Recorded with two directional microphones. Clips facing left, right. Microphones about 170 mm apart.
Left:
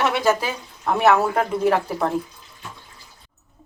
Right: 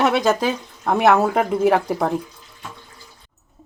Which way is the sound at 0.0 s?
20° right (ahead or behind).